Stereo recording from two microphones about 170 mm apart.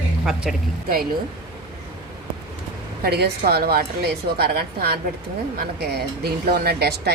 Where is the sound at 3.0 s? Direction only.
70° right (ahead or behind).